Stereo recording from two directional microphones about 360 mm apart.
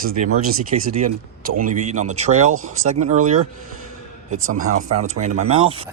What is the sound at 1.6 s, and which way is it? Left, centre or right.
Speech, centre.